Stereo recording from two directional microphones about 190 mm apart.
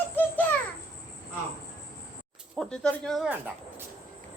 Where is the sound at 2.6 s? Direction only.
5° left (ahead or behind).